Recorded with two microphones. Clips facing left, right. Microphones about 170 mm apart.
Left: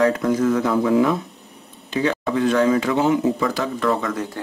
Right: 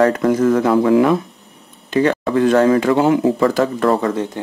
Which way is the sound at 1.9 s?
55° right (ahead or behind).